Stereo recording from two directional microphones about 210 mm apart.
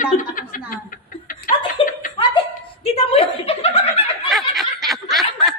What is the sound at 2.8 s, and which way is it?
Chuckle, 25° left (ahead or behind).